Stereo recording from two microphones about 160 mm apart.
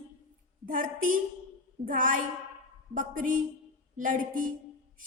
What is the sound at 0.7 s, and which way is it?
A woman's voice, 55° right (ahead or behind).